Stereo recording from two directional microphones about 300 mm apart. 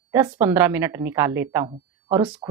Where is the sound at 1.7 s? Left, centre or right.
Centre.